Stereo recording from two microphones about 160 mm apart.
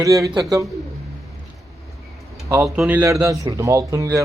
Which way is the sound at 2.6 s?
5° right (ahead or behind).